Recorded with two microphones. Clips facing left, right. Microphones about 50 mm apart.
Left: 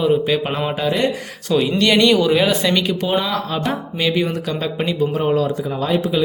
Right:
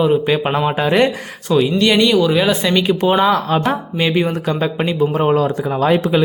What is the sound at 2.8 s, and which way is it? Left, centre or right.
Speech, right.